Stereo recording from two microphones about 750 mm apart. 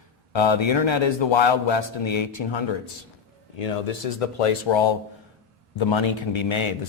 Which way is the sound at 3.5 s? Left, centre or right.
Left.